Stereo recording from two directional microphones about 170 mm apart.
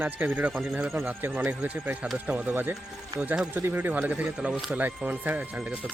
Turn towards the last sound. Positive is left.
turn(degrees=-5)  # may be behind; listen again after turning